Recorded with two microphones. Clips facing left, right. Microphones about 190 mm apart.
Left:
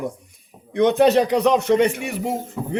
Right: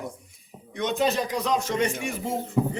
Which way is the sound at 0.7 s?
70° left (ahead or behind).